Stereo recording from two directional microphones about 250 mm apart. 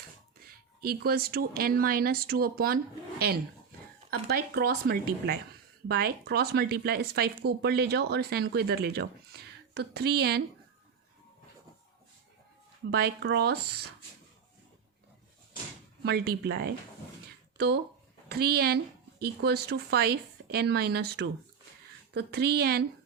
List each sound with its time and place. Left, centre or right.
0.5 s speech: right
12.9 s speech: right
16.0 s speech: right
18.3 s speech: right